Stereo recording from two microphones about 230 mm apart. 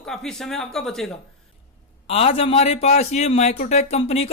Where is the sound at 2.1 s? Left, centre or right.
Left.